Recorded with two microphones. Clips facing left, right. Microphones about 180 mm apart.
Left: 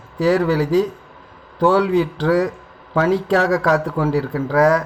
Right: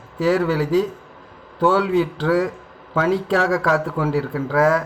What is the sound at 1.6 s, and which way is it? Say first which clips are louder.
Speech: left 2 dB; centre (ahead or behind).